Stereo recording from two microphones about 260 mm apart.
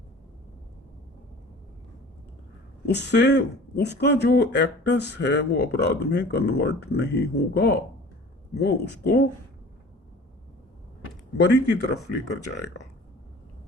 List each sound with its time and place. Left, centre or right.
2.8 s speech: left
11.3 s speech: left